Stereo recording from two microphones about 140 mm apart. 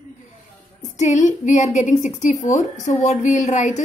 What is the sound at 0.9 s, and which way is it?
A woman's voice, 60° left (ahead or behind).